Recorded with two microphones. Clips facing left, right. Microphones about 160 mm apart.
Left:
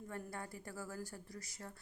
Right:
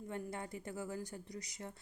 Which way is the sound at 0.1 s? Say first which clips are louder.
Right 4 dB; 20° right (ahead or behind).